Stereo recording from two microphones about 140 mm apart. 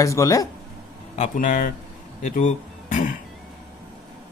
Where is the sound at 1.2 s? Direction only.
65° left (ahead or behind).